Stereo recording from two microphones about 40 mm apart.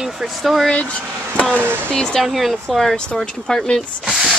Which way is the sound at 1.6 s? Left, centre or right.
Right.